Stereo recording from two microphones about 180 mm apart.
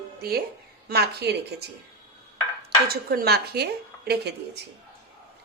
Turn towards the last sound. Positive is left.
turn(degrees=-65)  # may be behind; listen again after turning